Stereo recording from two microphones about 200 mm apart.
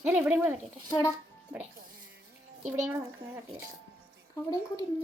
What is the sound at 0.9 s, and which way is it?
Speech, 15° left (ahead or behind).